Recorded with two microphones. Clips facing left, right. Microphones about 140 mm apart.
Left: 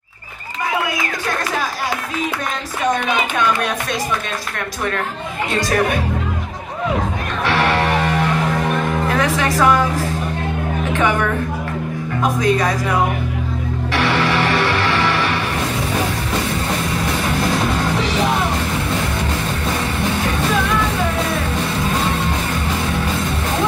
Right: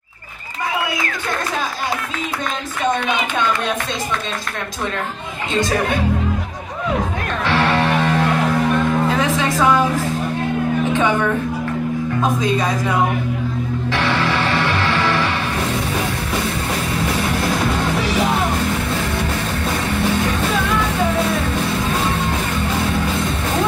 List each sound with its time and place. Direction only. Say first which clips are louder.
7.4 s music: even; 15° left (ahead or behind)
9.1 s a woman's voice: even; 15° right (ahead or behind)
12.2 s a woman's voice: left 3 dB; 15° right (ahead or behind)
13.9 s music: left 3 dB; 15° left (ahead or behind)